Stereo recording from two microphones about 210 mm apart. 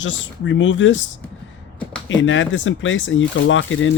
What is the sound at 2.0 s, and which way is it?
Speech, 65° left (ahead or behind).